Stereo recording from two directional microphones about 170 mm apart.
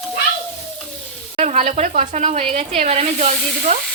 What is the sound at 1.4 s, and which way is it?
Speech, 45° right (ahead or behind).